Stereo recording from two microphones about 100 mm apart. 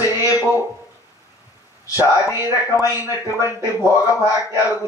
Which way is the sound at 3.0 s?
25° right (ahead or behind).